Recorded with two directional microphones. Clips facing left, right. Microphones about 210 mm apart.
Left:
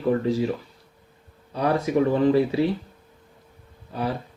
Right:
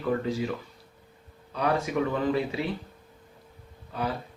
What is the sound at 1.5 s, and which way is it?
Speech, 30° left (ahead or behind).